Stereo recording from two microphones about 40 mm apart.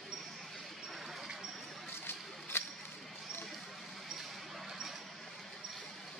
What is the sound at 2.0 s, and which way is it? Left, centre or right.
Single-lens reflex camera, left.